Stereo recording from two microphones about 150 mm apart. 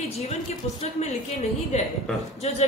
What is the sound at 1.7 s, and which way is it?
Speech, 50° left (ahead or behind).